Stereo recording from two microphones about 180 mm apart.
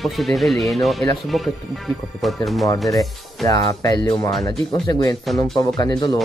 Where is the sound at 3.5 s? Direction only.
20° left (ahead or behind).